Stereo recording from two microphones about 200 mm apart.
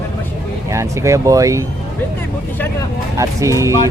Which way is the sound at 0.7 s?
15° right (ahead or behind).